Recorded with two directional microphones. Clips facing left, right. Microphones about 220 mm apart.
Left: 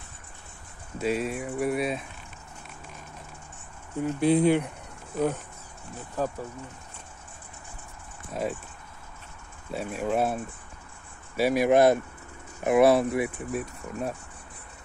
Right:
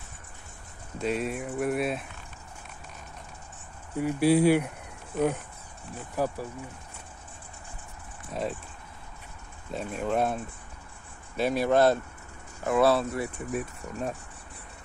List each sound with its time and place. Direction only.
0.9 s speech: 5° left (ahead or behind)
4.0 s speech: 10° right (ahead or behind)
6.1 s speech: 10° right (ahead or behind)
8.3 s speech: centre (ahead or behind)
9.7 s speech: 10° left (ahead or behind)
13.5 s speech: centre (ahead or behind)